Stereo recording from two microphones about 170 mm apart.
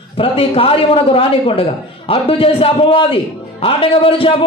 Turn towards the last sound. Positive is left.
turn(degrees=30)  # may be behind; listen again after turning